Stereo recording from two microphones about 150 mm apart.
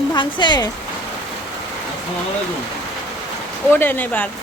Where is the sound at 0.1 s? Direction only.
30° left (ahead or behind).